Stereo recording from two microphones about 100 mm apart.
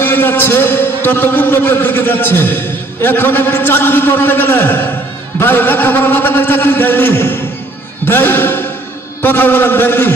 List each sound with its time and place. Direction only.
0.0 s a man's voice: 20° left (ahead or behind)